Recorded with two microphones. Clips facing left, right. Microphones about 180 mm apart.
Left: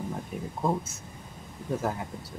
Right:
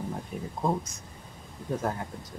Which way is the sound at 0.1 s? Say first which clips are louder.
Left 1 dB; centre (ahead or behind).